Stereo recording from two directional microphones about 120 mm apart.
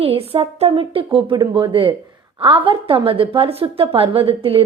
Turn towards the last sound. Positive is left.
turn(degrees=-50)  # may be behind; listen again after turning